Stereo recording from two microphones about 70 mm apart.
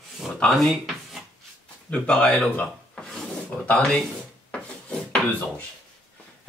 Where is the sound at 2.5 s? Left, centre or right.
Centre.